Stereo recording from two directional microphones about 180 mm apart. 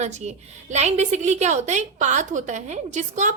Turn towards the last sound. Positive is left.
turn(degrees=-40)  # may be behind; listen again after turning